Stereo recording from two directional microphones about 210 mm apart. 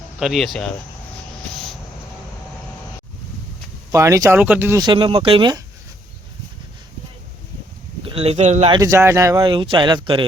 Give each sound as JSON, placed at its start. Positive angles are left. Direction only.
{"t": 0.2, "sound": "speech", "side_deg": 0}
{"t": 3.9, "sound": "speech", "side_deg": -15}
{"t": 8.0, "sound": "speech", "side_deg": -30}
{"t": 8.8, "sound": "speech", "side_deg": -15}